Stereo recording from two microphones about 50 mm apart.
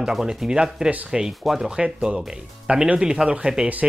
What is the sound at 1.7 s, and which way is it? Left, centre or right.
Speech, centre.